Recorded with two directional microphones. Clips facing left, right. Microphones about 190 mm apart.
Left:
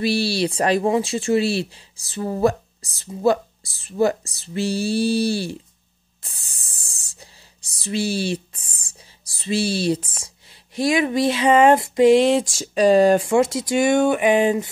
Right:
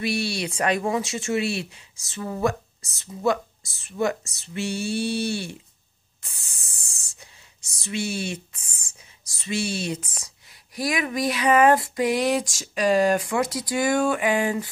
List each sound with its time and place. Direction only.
0.0 s speech: 35° left (ahead or behind)
6.2 s spray: 35° left (ahead or behind)
7.7 s speech: 35° left (ahead or behind)